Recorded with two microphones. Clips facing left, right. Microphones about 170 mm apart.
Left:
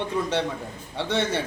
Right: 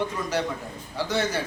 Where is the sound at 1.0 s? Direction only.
25° left (ahead or behind).